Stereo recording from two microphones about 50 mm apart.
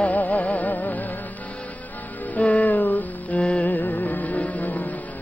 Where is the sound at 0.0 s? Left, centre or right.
Left.